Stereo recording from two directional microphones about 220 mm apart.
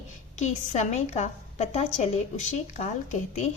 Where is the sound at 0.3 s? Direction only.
30° left (ahead or behind).